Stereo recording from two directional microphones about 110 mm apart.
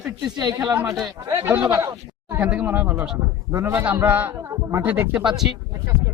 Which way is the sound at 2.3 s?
15° right (ahead or behind).